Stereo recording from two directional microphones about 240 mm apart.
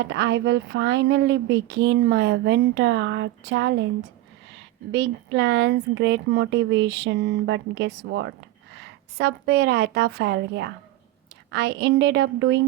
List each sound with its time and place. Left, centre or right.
0.0 s speech: right
4.9 s a woman's voice: right